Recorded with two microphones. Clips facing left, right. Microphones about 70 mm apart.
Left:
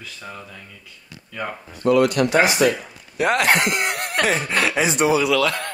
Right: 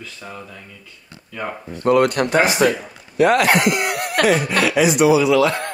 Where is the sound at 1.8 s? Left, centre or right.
Right.